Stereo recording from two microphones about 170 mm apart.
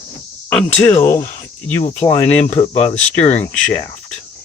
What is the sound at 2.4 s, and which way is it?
Speech, 35° left (ahead or behind).